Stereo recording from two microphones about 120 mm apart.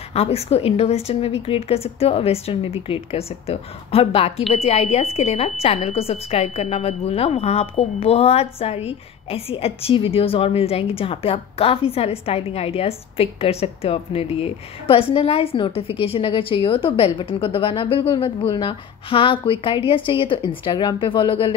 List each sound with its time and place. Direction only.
0.1 s a woman's voice: 55° left (ahead or behind)